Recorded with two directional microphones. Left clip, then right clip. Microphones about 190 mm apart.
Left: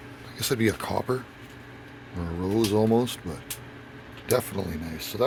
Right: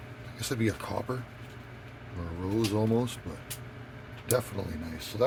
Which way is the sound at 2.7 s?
55° left (ahead or behind).